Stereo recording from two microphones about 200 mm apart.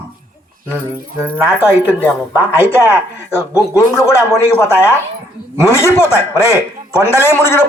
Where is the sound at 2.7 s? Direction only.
10° left (ahead or behind).